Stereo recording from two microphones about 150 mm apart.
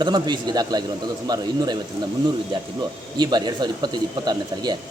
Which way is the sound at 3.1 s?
30° right (ahead or behind).